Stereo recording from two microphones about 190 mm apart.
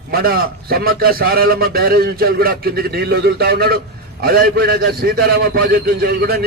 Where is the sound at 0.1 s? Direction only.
50° right (ahead or behind).